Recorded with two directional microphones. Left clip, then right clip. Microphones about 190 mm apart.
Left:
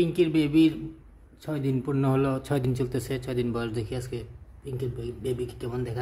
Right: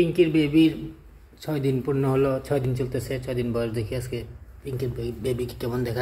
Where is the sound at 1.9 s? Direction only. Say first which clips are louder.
Right 3 dB; 20° left (ahead or behind); by 5.9 s 10° right (ahead or behind).